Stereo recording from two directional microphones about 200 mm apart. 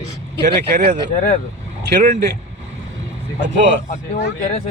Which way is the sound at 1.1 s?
40° left (ahead or behind).